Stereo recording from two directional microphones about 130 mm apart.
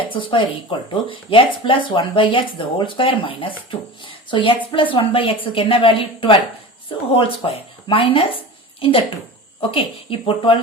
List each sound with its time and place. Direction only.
0.1 s a woman's voice: 40° left (ahead or behind)